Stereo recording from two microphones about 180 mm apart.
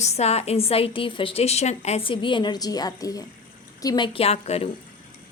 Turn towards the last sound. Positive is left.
turn(degrees=35)  # may be behind; listen again after turning